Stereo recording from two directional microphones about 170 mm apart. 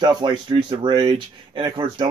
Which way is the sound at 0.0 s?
25° right (ahead or behind).